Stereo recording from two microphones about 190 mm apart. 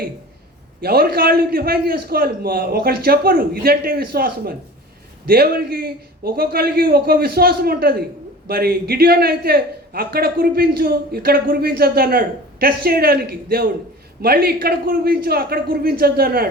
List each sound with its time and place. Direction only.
0.8 s a man's voice: 55° right (ahead or behind)